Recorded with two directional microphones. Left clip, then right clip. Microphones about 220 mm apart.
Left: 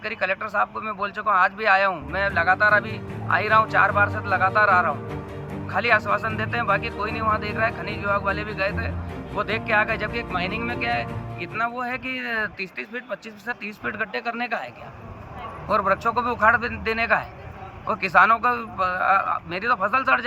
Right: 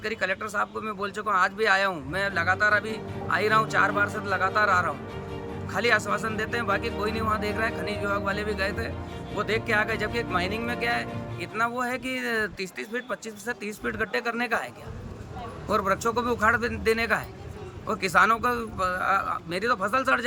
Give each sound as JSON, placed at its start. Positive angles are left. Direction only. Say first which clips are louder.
{"t": 0.0, "sound": "speech", "louder": "left 3 dB", "side_deg": -20}
{"t": 15.7, "sound": "speech", "louder": "left 4 dB", "side_deg": -20}